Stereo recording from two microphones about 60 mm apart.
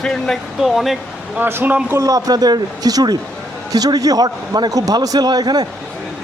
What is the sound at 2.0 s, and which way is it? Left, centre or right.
Speech, right.